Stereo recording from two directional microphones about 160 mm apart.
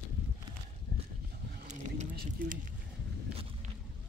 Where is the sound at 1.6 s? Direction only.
50° right (ahead or behind).